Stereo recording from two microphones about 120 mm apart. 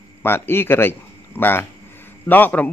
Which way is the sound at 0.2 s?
20° left (ahead or behind).